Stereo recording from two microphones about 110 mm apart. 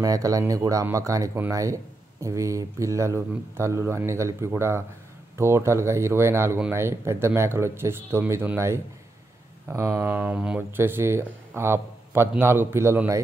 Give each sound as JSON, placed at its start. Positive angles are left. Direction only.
{"t": 0.0, "sound": "speech", "side_deg": -35}